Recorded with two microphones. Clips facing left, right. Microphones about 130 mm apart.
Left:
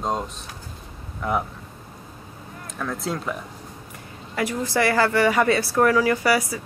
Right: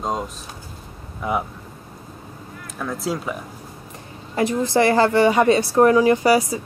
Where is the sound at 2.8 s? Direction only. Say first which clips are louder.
Right 2 dB; 5° right (ahead or behind).